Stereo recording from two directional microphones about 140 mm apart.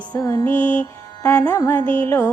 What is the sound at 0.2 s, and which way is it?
Mantra, 20° left (ahead or behind).